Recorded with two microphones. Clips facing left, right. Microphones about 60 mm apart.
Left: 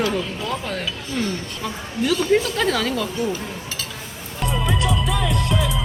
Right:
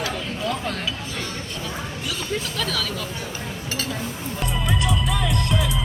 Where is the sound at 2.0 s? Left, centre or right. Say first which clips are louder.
Left 12 dB; left.